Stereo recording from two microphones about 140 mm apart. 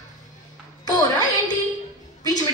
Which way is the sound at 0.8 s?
25° left (ahead or behind).